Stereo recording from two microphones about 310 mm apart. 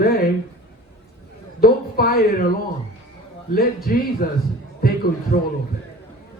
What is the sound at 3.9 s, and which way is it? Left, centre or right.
A man's voice, left.